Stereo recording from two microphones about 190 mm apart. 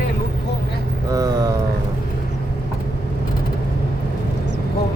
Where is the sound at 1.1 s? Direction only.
20° right (ahead or behind).